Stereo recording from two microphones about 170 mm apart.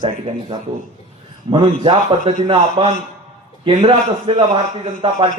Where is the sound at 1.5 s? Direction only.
30° right (ahead or behind).